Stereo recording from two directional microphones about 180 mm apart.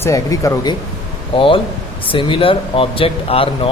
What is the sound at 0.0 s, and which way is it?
A man's voice, 15° left (ahead or behind).